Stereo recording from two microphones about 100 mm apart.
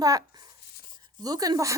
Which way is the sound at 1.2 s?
40° right (ahead or behind).